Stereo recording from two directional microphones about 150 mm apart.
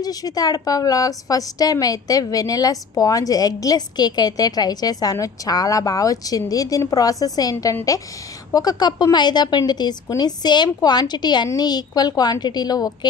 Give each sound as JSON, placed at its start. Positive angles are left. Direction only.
{"t": 0.0, "sound": "a woman's voice", "side_deg": 25}